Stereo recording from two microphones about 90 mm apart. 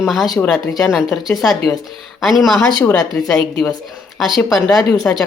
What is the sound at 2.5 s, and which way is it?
Speech, 25° left (ahead or behind).